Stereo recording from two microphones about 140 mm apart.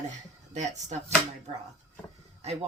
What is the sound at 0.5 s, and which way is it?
Speech, 55° right (ahead or behind).